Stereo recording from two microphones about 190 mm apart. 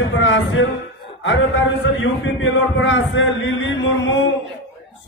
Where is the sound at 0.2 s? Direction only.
80° left.